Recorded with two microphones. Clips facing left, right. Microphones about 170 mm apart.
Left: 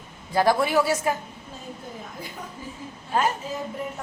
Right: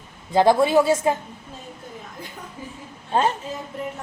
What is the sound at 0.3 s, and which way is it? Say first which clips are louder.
Speech: right 4 dB; 20° right (ahead or behind).